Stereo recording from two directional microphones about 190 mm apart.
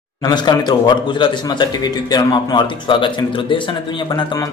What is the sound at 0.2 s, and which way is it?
A man's voice, 25° left (ahead or behind).